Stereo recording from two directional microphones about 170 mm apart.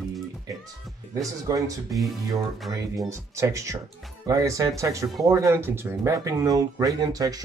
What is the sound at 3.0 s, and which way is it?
Speech, 15° right (ahead or behind).